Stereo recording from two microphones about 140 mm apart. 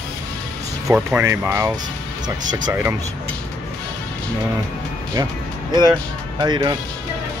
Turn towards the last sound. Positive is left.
turn(degrees=-35)  # may be behind; listen again after turning